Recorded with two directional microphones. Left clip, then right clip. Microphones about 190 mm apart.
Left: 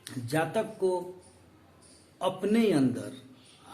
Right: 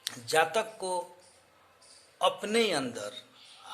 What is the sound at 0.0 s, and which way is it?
Speech, 20° right (ahead or behind).